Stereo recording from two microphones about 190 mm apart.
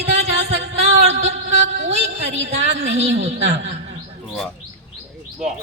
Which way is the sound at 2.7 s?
65° right (ahead or behind).